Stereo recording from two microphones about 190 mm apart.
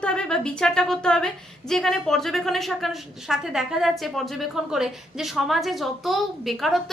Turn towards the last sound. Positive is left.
turn(degrees=0)  # may be behind; listen again after turning